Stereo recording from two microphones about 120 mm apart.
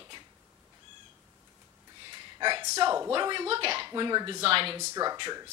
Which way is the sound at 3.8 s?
40° right (ahead or behind).